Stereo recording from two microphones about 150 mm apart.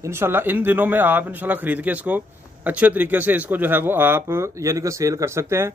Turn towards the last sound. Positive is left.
turn(degrees=-20)  # may be behind; listen again after turning